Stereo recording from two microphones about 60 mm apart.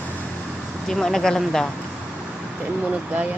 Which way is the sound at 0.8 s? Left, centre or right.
Centre.